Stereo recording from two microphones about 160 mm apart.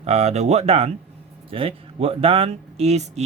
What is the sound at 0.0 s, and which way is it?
Speech, 45° right (ahead or behind).